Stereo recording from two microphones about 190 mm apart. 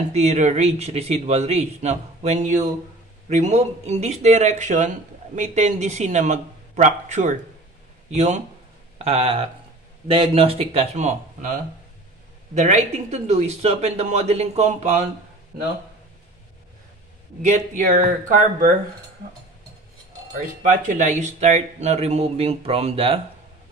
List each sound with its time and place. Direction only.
0.1 s speech: 35° right (ahead or behind)
17.4 s speech: 40° right (ahead or behind)
20.6 s speech: 45° right (ahead or behind)